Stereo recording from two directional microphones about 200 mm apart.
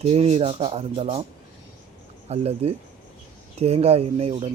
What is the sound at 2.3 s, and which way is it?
Speech, 30° right (ahead or behind).